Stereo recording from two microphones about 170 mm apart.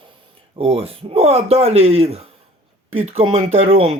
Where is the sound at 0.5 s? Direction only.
35° right (ahead or behind).